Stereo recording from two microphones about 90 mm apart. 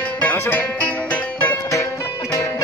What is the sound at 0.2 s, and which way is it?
Music, 20° left (ahead or behind).